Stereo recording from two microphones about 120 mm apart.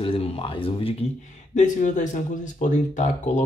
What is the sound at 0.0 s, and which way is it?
Speech, 50° left (ahead or behind).